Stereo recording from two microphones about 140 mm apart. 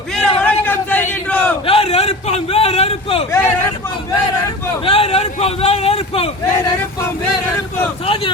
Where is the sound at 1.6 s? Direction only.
40° left (ahead or behind).